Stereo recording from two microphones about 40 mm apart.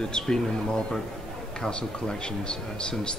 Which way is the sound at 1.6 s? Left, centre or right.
Centre.